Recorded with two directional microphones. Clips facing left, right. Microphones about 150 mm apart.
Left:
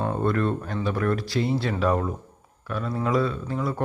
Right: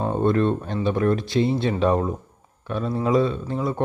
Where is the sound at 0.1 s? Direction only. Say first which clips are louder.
Right 7 dB; 25° right (ahead or behind).